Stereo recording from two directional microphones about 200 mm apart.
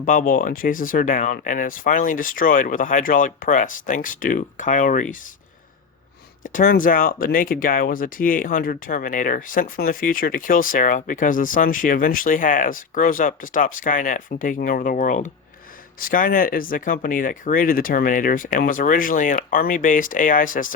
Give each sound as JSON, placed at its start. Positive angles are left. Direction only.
{"t": 0.0, "sound": "speech", "side_deg": 45}
{"t": 6.4, "sound": "speech", "side_deg": 45}